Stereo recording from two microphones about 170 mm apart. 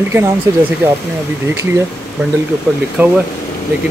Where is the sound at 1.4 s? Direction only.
15° right (ahead or behind).